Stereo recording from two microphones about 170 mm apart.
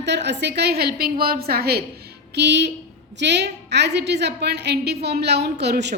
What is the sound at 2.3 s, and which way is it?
A woman's voice, 85° right.